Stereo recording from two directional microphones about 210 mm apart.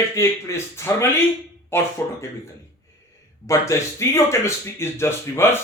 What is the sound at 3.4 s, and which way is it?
Speech, 15° left (ahead or behind).